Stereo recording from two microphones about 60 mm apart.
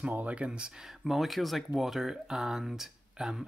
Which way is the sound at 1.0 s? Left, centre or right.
Centre.